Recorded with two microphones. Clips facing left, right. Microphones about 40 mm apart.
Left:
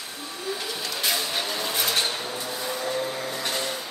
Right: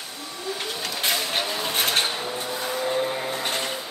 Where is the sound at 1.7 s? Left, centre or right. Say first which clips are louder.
Right 3 dB; right.